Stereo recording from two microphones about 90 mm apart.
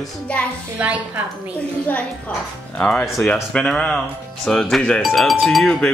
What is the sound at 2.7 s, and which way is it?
A child's voice, 15° left (ahead or behind).